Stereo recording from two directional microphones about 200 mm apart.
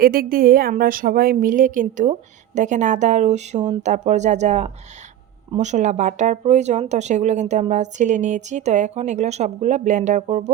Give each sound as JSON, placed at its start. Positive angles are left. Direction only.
{"t": 0.0, "sound": "a woman's voice", "side_deg": -50}